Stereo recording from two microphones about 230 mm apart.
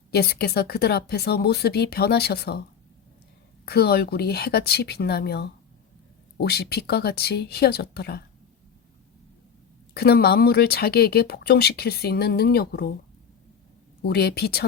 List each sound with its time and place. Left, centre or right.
0.1 s speech: left
3.7 s speech: left
9.9 s speech: left
14.1 s speech: left